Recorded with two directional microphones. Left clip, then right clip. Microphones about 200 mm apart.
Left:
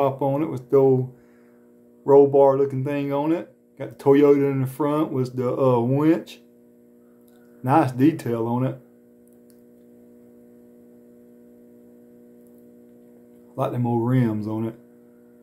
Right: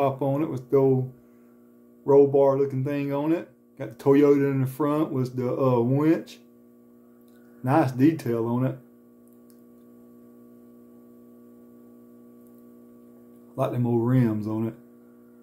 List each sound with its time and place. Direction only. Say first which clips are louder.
0.0 s speech: left 3 dB; 10° left (ahead or behind)
2.0 s speech: left 4 dB; 20° left (ahead or behind)
7.6 s speech: left 3 dB; 10° left (ahead or behind)
13.6 s speech: left 1 dB; 5° left (ahead or behind)